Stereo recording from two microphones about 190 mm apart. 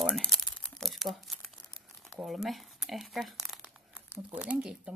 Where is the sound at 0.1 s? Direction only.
Centre (ahead or behind).